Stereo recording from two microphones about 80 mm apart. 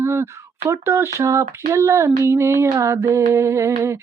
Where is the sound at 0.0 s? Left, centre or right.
Right.